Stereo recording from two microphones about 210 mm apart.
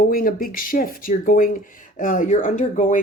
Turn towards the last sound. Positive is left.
turn(degrees=35)  # may be behind; listen again after turning